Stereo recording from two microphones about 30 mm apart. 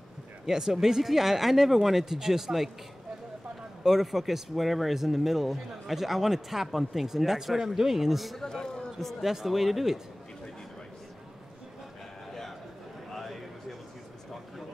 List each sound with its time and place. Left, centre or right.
0.5 s speech: centre
3.8 s speech: centre
8.4 s a man's voice: centre
9.2 s speech: centre
13.1 s a sound: centre